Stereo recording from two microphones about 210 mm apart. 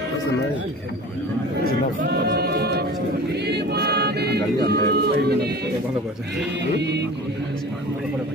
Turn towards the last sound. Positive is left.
turn(degrees=-55)  # may be behind; listen again after turning